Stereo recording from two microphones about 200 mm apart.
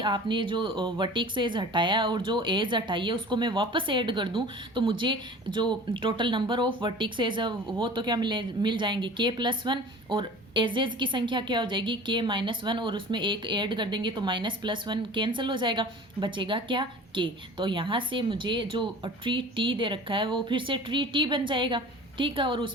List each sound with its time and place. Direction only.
0.0 s a woman's voice: 25° right (ahead or behind)